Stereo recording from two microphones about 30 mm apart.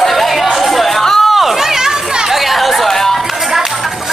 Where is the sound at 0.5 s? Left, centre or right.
Centre.